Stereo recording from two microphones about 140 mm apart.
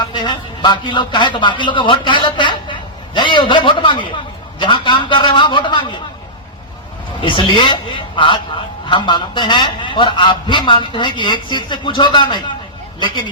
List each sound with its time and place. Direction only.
0.1 s a man's voice: 35° left (ahead or behind)
7.3 s speech: 35° left (ahead or behind)